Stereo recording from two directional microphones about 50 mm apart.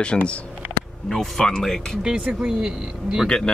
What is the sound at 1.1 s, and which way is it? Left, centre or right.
Speech, centre.